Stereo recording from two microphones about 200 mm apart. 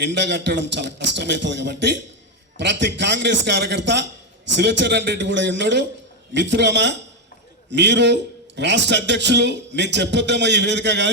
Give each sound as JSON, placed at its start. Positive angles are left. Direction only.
{"t": 0.0, "sound": "a man's voice", "side_deg": -60}